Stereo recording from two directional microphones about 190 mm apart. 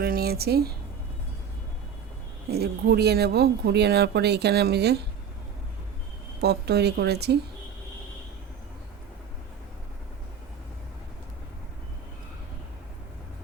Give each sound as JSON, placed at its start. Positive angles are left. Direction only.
{"t": 0.0, "sound": "speech", "side_deg": -55}
{"t": 2.5, "sound": "speech", "side_deg": -55}
{"t": 6.4, "sound": "speech", "side_deg": -60}